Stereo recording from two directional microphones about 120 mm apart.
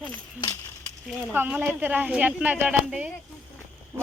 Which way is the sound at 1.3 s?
15° right (ahead or behind).